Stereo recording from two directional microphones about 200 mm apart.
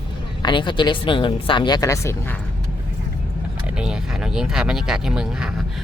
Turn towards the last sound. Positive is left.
turn(degrees=-5)  # may be behind; listen again after turning